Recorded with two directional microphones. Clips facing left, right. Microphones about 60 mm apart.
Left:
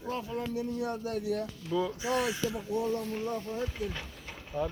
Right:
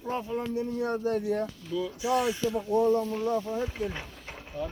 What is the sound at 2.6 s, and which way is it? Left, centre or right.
Speech, right.